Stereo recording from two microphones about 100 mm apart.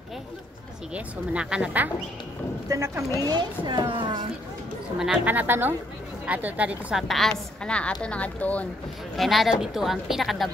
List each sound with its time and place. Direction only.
0.9 s speech: 10° right (ahead or behind)
2.7 s a woman's voice: 30° right (ahead or behind)
3.3 s speech: 45° right (ahead or behind)
4.9 s a woman's voice: 5° right (ahead or behind)
5.2 s a woman's voice: 20° right (ahead or behind)
7.0 s a woman's voice: centre (ahead or behind)
9.1 s a woman's voice: centre (ahead or behind)